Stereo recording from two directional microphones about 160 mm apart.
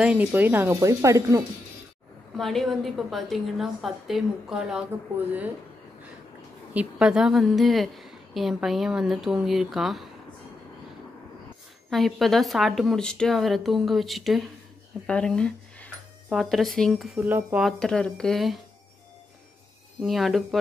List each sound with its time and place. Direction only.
0.0 s speech: 10° right (ahead or behind)
2.3 s a woman's voice: centre (ahead or behind)
6.7 s a woman's voice: 5° right (ahead or behind)
11.9 s a woman's voice: centre (ahead or behind)
20.0 s a woman's voice: centre (ahead or behind)